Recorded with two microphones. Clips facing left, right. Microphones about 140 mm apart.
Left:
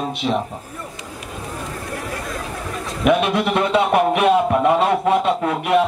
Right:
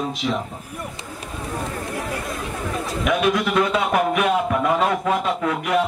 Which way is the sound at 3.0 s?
30° left (ahead or behind).